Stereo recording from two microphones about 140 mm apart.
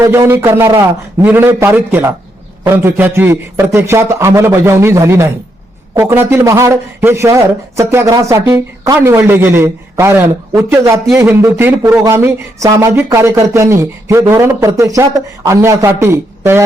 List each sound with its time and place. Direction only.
0.0 s a man's voice: 20° right (ahead or behind)